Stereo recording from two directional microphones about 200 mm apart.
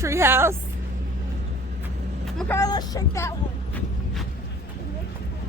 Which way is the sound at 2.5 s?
20° left (ahead or behind).